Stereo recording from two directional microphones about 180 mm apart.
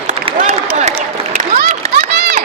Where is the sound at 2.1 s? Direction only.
65° right (ahead or behind).